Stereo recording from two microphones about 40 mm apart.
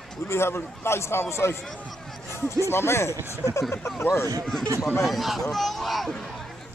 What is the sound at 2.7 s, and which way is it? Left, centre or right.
A man's voice, left.